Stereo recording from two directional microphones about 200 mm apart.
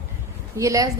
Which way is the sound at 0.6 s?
15° right (ahead or behind).